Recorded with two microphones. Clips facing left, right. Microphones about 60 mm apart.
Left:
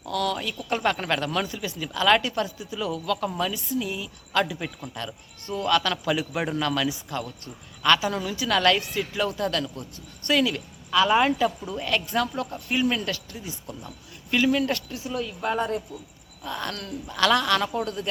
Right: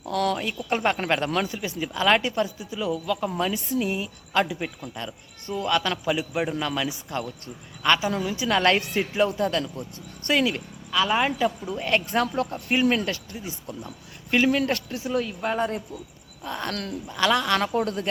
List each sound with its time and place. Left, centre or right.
0.0 s a man's voice: right; by 3.3 s centre
3.3 s speech: right
4.3 s a man's voice: centre
10.9 s a woman's voice: centre
11.7 s speech: right
13.1 s speech: right
15.2 s speech: right
17.1 s a man's voice: centre
17.7 s speech: right